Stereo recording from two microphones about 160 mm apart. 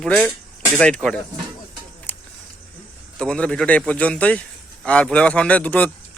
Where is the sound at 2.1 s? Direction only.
10° left (ahead or behind).